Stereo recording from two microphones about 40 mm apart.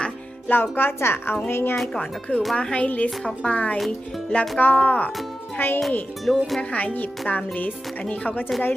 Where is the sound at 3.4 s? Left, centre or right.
Left.